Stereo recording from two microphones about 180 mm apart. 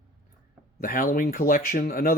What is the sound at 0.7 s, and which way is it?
Speech, 50° left (ahead or behind).